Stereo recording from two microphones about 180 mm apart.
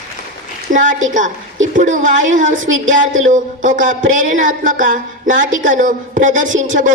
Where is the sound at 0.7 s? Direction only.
45° right (ahead or behind).